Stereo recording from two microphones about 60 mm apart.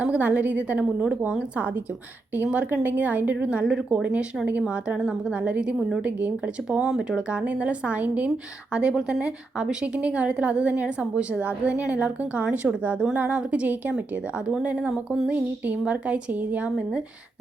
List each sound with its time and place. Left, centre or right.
0.0 s a woman's voice: right
15.3 s a woman's voice: right